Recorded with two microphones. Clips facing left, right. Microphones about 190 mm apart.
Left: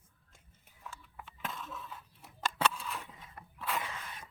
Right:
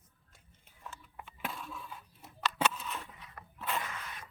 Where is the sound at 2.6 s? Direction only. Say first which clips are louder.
Left 1 dB; 5° right (ahead or behind).